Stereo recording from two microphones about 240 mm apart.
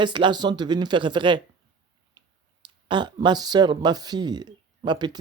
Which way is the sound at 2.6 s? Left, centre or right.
Centre.